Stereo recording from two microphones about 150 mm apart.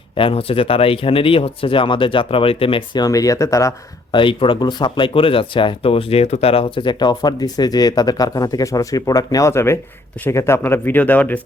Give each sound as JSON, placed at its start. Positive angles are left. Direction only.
{"t": 0.2, "sound": "speech", "side_deg": 40}
{"t": 4.2, "sound": "speech", "side_deg": 35}